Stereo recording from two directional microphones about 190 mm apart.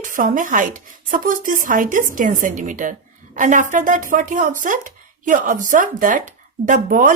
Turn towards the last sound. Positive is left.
turn(degrees=-45)  # may be behind; listen again after turning